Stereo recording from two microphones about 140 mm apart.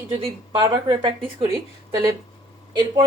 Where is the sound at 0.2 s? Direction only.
35° right (ahead or behind).